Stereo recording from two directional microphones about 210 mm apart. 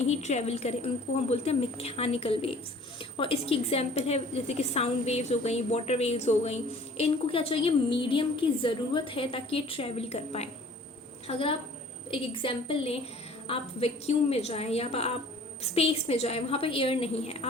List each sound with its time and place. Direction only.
0.1 s a woman's voice: 30° left (ahead or behind)